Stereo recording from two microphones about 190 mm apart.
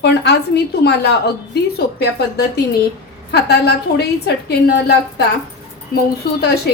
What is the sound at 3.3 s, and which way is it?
A woman's voice, 60° left (ahead or behind).